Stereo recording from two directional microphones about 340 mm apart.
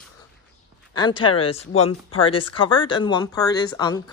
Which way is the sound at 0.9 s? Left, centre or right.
Centre.